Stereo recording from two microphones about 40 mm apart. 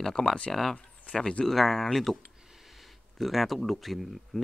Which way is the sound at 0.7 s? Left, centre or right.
Left.